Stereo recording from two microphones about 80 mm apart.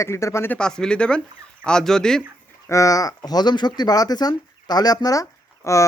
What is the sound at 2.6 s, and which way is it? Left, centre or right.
Speech, left.